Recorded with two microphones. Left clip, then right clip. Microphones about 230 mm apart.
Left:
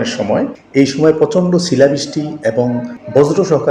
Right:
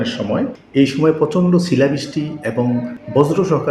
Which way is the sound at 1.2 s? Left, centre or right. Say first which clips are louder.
Left 3 dB; right.